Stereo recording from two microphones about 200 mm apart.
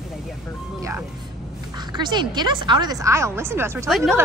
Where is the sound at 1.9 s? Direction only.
20° right (ahead or behind).